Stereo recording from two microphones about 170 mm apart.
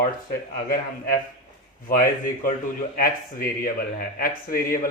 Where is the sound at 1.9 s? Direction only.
55° left (ahead or behind).